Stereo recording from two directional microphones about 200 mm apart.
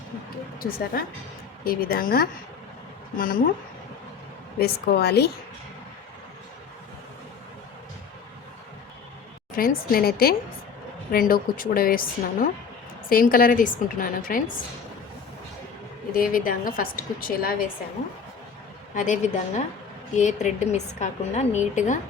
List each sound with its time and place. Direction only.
1.6 s a woman's voice: 50° left (ahead or behind)
4.6 s a woman's voice: 50° left (ahead or behind)
9.6 s a woman's voice: 45° left (ahead or behind)
16.1 s a woman's voice: 45° left (ahead or behind)
18.9 s a woman's voice: 40° left (ahead or behind)